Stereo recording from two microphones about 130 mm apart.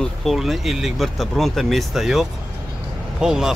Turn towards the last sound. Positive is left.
turn(degrees=-5)  # may be behind; listen again after turning